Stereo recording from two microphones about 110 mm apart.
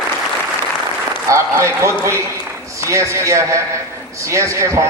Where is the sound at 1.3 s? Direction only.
25° right (ahead or behind).